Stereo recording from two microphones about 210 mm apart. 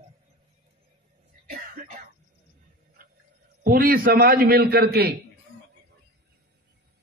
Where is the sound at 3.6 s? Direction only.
45° right (ahead or behind).